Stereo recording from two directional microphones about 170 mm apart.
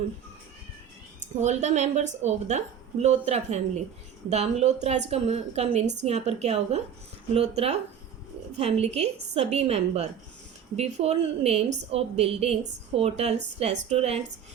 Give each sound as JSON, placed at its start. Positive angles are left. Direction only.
{"t": 1.4, "sound": "a woman's voice", "side_deg": -45}